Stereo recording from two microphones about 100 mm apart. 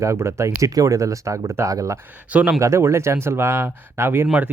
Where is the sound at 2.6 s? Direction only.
30° right (ahead or behind).